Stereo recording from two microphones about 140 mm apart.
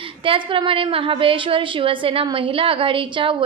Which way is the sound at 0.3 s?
35° right (ahead or behind).